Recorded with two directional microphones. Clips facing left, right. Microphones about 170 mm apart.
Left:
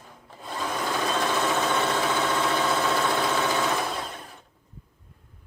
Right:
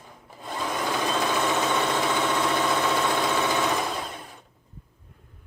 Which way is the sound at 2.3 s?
Centre (ahead or behind).